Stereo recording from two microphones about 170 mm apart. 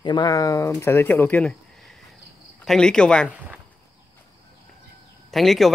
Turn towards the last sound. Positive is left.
turn(degrees=0)  # may be behind; listen again after turning